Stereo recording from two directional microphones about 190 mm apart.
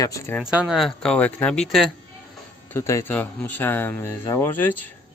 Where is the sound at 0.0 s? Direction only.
15° left (ahead or behind).